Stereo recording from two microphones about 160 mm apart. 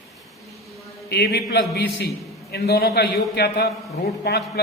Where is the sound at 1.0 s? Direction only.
90° left.